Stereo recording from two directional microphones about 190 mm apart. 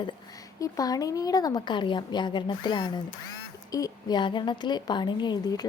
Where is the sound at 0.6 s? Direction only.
20° left (ahead or behind).